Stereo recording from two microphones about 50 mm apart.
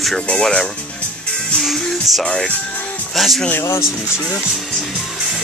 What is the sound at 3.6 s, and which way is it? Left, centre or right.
Speech, left.